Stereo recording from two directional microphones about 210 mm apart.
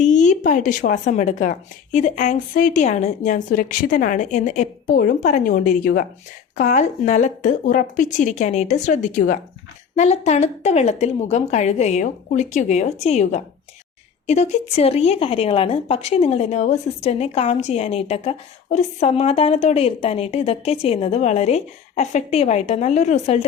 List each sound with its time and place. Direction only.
0.0 s speech: 35° left (ahead or behind)